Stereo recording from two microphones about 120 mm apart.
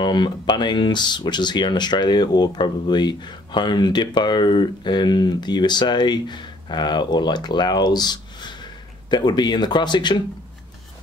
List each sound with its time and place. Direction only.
0.0 s speech: 40° left (ahead or behind)